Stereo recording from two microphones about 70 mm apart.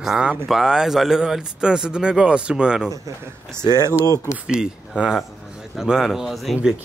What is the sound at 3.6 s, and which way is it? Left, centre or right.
Speech, left.